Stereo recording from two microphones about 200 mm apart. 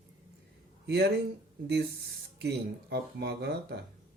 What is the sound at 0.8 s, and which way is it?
Speech, 55° right (ahead or behind).